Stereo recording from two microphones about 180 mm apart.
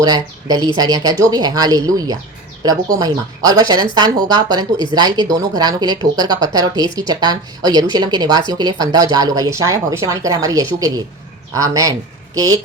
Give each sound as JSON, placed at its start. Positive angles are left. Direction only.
{"t": 0.0, "sound": "speech", "side_deg": -20}